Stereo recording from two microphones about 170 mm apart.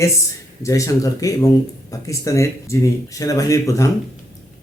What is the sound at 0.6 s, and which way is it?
Speech, 20° left (ahead or behind).